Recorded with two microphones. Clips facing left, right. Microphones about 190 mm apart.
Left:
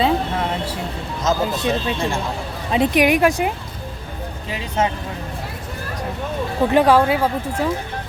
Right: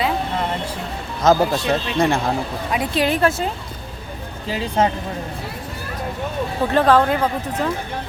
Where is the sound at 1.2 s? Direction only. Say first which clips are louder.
Right 4 dB; 60° right (ahead or behind).